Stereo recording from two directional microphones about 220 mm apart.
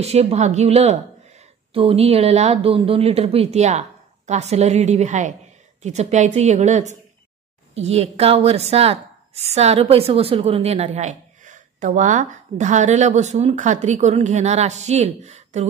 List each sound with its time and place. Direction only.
0.0 s a woman's voice: 30° right (ahead or behind)